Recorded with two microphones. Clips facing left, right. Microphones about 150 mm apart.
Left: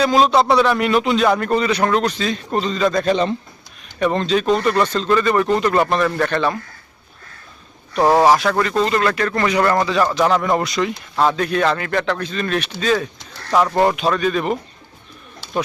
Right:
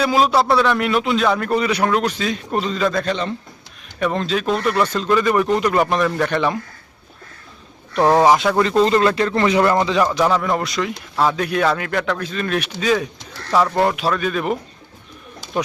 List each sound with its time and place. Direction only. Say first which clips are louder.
0.0 s a man's voice: left 2 dB; 5° right (ahead or behind)
3.1 s speech: left 5 dB; 15° left (ahead or behind)
4.0 s speech: left 3 dB; centre (ahead or behind)
8.0 s a man's voice: even; 5° left (ahead or behind)
8.8 s speech: right 4 dB; 30° right (ahead or behind)
10.2 s a man's voice: left 1 dB; 10° left (ahead or behind); by 13.1 s 10° right (ahead or behind)
13.5 s speech: left 1 dB; 10° left (ahead or behind)
13.9 s a man's voice: left 2 dB; 5° right (ahead or behind)